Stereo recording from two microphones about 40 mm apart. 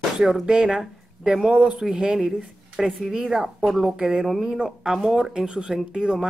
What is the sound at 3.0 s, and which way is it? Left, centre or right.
Speech, centre.